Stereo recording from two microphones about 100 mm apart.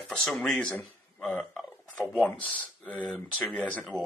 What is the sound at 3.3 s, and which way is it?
Speech, 10° left (ahead or behind).